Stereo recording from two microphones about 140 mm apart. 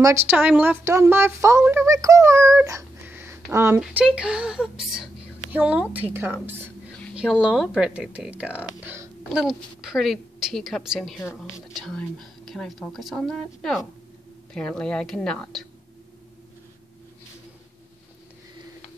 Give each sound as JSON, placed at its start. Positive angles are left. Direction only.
{"t": 0.0, "sound": "speech", "side_deg": -15}
{"t": 9.3, "sound": "speech", "side_deg": -5}